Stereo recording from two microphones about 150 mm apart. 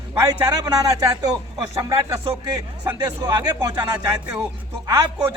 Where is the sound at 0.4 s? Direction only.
25° right (ahead or behind).